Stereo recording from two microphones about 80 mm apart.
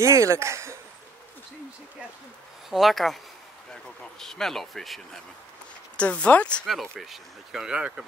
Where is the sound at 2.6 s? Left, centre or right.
Centre.